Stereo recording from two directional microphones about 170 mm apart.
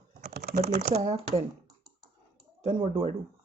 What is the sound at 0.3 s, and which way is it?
Speech, 60° right (ahead or behind).